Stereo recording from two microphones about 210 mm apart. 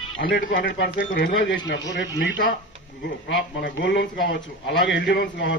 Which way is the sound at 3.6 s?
55° left (ahead or behind).